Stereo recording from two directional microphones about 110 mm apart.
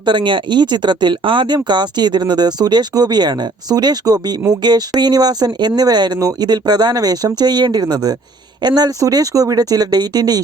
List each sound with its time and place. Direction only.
0.0 s speech: 45° right (ahead or behind)